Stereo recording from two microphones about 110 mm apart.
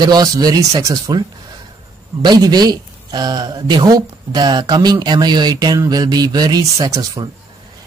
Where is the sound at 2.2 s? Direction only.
40° right (ahead or behind).